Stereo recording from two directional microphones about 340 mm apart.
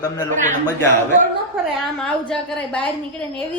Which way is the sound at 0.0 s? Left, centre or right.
Centre.